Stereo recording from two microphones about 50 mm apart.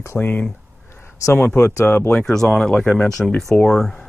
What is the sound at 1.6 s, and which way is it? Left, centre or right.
Speech, left.